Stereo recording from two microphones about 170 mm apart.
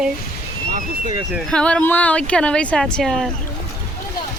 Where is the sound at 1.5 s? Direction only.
5° left (ahead or behind).